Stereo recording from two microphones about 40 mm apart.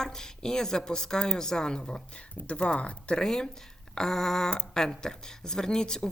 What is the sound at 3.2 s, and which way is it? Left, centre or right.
Speech, centre.